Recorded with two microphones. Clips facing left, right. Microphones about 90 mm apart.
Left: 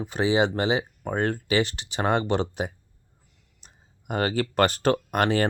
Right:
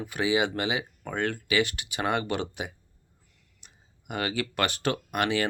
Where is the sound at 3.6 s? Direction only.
35° left (ahead or behind).